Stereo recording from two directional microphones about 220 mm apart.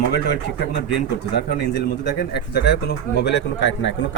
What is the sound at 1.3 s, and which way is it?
Speech, 50° left (ahead or behind).